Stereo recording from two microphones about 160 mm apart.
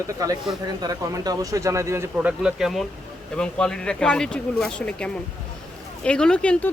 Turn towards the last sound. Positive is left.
turn(degrees=5)  # may be behind; listen again after turning